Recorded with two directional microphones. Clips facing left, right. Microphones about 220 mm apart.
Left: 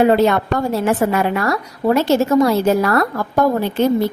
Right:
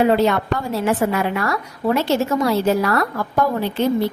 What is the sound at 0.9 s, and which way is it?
A woman's voice, 45° left (ahead or behind).